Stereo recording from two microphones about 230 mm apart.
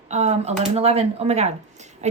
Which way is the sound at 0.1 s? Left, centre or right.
Right.